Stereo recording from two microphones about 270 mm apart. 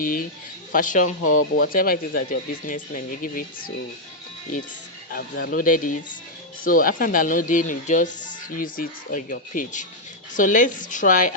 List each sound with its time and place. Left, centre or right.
0.0 s speech: left
5.1 s speech: left